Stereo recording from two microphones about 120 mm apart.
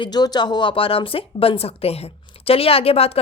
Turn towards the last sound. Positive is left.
turn(degrees=55)  # may be behind; listen again after turning